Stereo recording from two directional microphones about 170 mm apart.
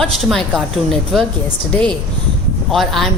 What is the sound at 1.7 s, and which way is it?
Speech, 5° left (ahead or behind).